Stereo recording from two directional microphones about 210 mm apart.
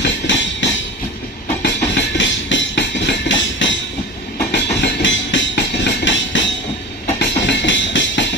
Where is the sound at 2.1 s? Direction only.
60° left (ahead or behind).